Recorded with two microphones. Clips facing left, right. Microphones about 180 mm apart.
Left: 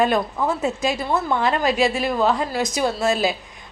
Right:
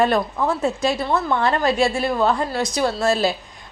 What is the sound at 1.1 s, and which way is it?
A woman's voice, 10° left (ahead or behind).